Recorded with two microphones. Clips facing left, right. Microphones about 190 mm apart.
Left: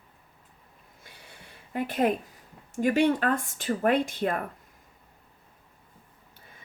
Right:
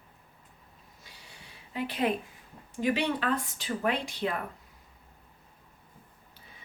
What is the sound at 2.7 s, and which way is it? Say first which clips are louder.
Speech: left 6 dB; 45° left (ahead or behind).